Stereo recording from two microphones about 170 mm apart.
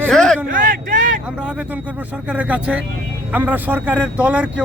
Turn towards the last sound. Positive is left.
turn(degrees=-10)  # may be behind; listen again after turning